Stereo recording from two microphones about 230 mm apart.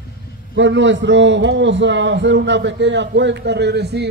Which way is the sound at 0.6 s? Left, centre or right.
Right.